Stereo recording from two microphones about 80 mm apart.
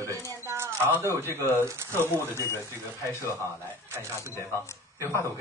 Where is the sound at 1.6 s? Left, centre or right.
Right.